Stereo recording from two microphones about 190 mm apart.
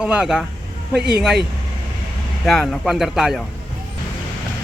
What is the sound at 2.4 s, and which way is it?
Speech, centre (ahead or behind).